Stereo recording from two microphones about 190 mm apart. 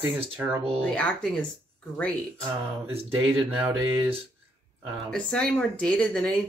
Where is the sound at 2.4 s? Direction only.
10° right (ahead or behind).